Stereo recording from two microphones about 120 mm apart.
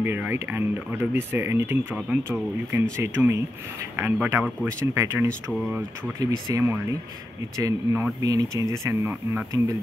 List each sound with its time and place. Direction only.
0.0 s speech: 15° right (ahead or behind)
6.5 s speech: 25° right (ahead or behind)